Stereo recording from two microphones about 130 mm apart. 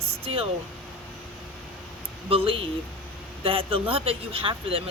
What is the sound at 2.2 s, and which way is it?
Speech, 45° right (ahead or behind).